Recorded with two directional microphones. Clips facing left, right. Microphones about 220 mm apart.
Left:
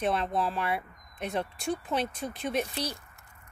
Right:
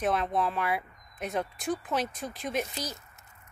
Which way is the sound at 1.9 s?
Centre (ahead or behind).